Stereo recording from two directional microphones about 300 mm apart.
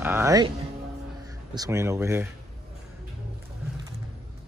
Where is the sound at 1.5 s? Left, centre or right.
Centre.